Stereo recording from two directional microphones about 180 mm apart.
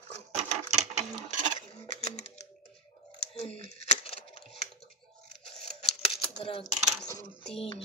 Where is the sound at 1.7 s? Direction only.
35° left (ahead or behind).